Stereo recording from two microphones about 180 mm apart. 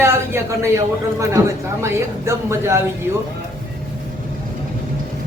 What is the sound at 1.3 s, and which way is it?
Speech, 15° right (ahead or behind).